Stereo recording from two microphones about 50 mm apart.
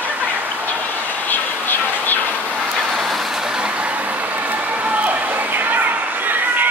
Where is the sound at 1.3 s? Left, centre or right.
Left.